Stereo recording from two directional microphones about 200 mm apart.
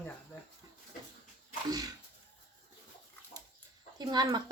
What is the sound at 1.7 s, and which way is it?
Sneeze, 20° right (ahead or behind).